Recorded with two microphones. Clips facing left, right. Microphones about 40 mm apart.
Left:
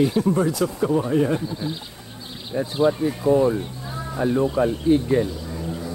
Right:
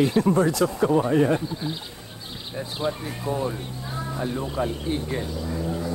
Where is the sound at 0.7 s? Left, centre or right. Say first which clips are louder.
Even; centre.